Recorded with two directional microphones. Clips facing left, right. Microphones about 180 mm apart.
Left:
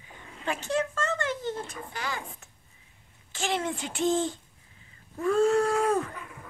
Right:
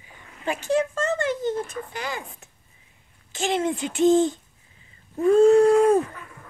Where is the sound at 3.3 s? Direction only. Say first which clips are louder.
Right 6 dB; 20° right (ahead or behind).